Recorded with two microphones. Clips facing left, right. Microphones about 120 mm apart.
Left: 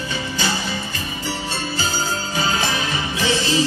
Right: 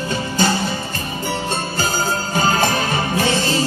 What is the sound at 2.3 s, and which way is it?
Music, 50° right (ahead or behind).